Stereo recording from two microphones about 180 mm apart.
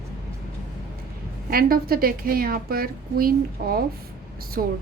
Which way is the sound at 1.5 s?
55° right (ahead or behind).